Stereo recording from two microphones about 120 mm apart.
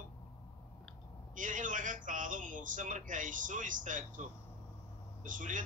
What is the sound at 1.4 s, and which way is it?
Speech, 90° right.